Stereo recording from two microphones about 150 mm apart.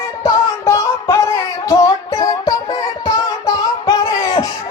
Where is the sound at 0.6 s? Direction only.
20° left (ahead or behind).